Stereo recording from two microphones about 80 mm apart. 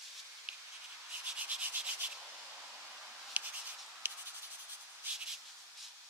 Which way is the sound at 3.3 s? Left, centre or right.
Right.